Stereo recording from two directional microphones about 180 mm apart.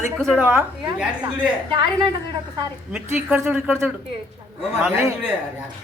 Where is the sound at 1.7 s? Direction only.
25° right (ahead or behind).